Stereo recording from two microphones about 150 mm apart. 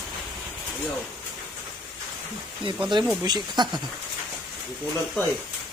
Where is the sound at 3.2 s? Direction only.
30° right (ahead or behind).